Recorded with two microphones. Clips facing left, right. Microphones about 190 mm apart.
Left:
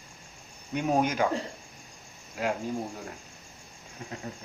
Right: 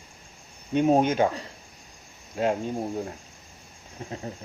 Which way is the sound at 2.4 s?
25° right (ahead or behind).